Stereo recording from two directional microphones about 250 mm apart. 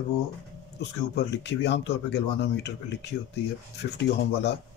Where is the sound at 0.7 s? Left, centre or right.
Left.